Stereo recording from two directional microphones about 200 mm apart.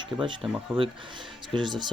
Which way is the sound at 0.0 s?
25° right (ahead or behind).